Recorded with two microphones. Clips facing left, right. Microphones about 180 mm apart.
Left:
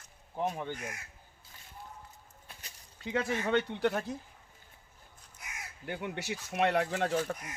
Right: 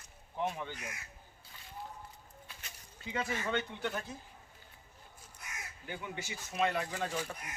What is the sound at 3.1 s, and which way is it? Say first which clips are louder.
Speech: left 5 dB; 65° left (ahead or behind).